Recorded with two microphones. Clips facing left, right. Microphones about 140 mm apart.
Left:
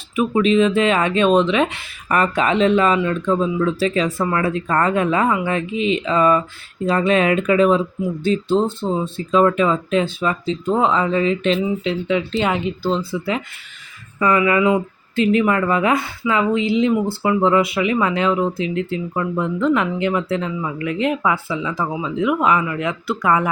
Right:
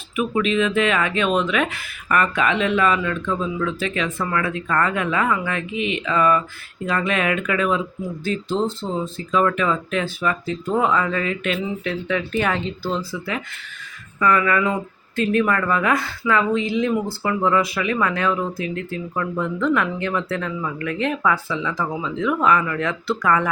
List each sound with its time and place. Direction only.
0.2 s speech: 35° left (ahead or behind)
8.9 s speech: 25° left (ahead or behind)